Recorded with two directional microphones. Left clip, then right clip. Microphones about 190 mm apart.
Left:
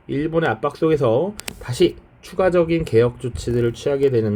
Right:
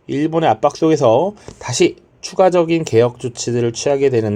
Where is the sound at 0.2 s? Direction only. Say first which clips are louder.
Right 6 dB; 20° right (ahead or behind).